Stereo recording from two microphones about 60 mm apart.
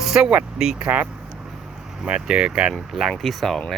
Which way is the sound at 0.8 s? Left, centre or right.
Right.